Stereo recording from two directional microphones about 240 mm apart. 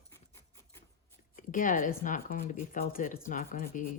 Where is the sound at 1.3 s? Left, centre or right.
Left.